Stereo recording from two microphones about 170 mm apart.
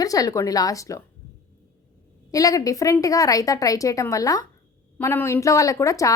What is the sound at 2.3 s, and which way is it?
A woman's voice, 20° left (ahead or behind).